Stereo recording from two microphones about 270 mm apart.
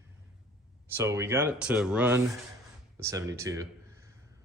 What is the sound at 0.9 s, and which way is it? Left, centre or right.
Speech, centre.